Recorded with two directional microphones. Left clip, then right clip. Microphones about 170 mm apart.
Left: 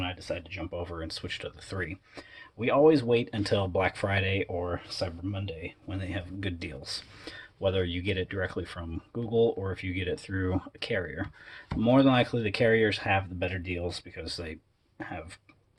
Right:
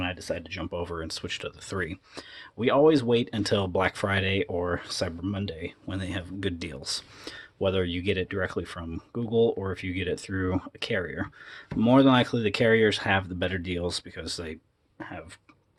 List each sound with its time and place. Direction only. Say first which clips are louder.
0.0 s speech: right 3 dB; 45° right (ahead or behind); by 4.4 s 25° right (ahead or behind)
4.5 s speech: right 4 dB; 45° right (ahead or behind)
14.3 s speech: right 2 dB; 25° right (ahead or behind)
14.9 s speech: even; 10° right (ahead or behind)